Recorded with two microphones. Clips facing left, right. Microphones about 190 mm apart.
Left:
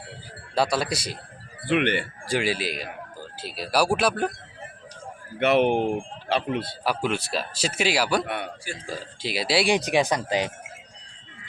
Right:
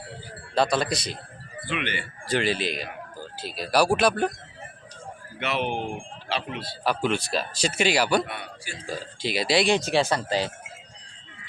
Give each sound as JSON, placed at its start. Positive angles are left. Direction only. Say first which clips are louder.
{"t": 0.5, "sound": "speech", "louder": "right 1 dB", "side_deg": 5}
{"t": 1.6, "sound": "speech", "louder": "left 8 dB", "side_deg": 60}
{"t": 2.2, "sound": "speech", "louder": "right 2 dB", "side_deg": 10}
{"t": 5.4, "sound": "speech", "louder": "left 8 dB", "side_deg": 55}
{"t": 5.8, "sound": "speech", "louder": "left 7 dB", "side_deg": 40}
{"t": 6.8, "sound": "speech", "louder": "right 3 dB", "side_deg": 5}
{"t": 8.3, "sound": "speech", "louder": "left 6 dB", "side_deg": 60}
{"t": 8.9, "sound": "speech", "louder": "right 3 dB", "side_deg": 0}